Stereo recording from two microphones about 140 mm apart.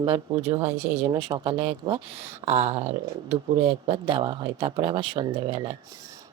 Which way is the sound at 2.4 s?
50° right (ahead or behind).